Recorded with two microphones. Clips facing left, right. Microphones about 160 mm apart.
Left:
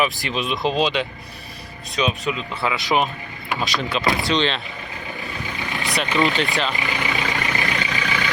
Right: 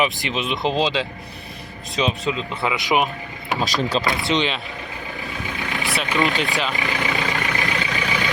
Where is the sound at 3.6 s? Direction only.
40° right (ahead or behind).